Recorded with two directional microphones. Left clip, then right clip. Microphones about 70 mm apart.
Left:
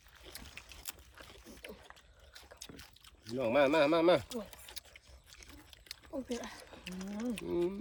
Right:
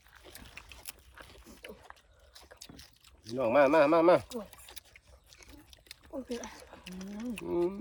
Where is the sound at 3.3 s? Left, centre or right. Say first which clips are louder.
Right 4 dB; right.